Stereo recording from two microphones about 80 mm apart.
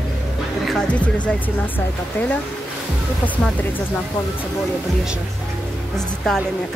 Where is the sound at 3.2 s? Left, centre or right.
Centre.